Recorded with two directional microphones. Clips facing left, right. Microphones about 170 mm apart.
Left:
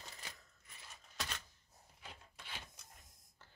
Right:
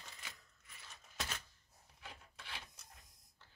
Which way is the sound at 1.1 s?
5° right (ahead or behind).